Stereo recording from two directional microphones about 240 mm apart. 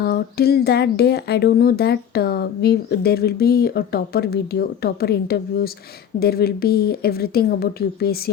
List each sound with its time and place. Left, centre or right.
0.0 s speech: left